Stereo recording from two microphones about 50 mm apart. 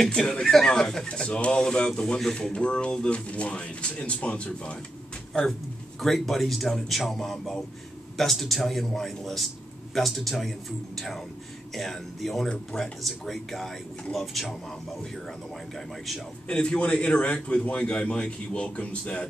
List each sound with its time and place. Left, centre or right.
0.0 s speech: centre
5.9 s speech: centre
16.4 s speech: centre